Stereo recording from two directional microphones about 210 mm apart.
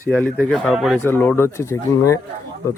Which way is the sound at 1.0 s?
10° left (ahead or behind).